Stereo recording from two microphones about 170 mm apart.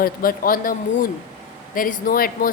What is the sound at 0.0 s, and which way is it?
Speech, 55° left (ahead or behind).